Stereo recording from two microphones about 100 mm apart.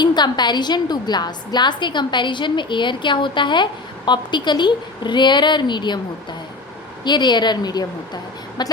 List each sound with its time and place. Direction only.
0.0 s a woman's voice: 45° left (ahead or behind)
7.0 s a woman's voice: 50° left (ahead or behind)